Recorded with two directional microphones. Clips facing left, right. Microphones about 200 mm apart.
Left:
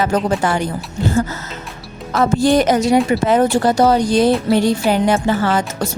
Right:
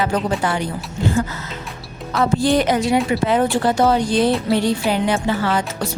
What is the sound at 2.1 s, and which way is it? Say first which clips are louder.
Speech: left 3 dB; 45° left (ahead or behind).